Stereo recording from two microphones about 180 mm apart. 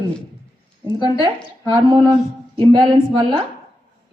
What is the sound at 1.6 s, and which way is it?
A woman's voice, 25° right (ahead or behind).